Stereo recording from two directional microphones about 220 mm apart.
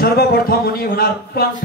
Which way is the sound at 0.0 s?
45° left (ahead or behind).